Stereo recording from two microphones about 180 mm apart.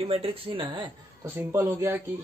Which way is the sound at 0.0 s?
30° right (ahead or behind).